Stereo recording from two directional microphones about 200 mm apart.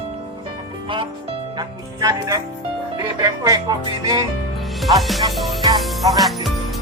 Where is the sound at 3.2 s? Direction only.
20° right (ahead or behind).